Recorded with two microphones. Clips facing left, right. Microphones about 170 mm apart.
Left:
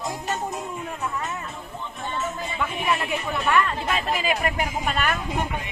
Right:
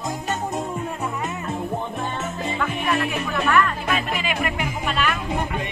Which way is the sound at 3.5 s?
25° left (ahead or behind).